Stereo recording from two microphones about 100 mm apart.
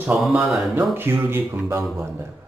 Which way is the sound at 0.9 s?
25° right (ahead or behind).